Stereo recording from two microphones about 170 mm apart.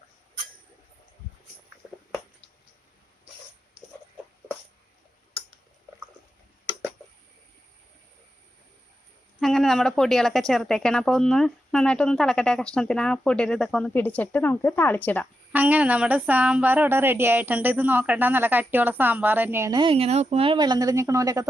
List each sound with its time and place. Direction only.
9.4 s a woman's voice: centre (ahead or behind)
15.5 s a woman's voice: 10° right (ahead or behind)
19.8 s speech: 35° right (ahead or behind); by 21.4 s 20° right (ahead or behind)